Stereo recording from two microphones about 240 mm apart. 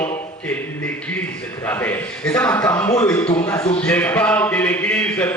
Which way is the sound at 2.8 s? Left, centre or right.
Left.